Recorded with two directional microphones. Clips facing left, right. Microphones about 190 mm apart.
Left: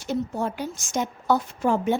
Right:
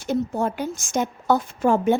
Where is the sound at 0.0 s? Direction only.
50° right (ahead or behind).